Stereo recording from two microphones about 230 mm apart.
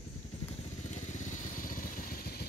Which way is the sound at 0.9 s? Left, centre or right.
Left.